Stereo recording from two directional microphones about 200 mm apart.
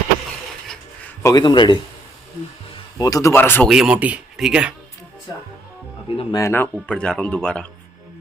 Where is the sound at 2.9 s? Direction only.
20° left (ahead or behind).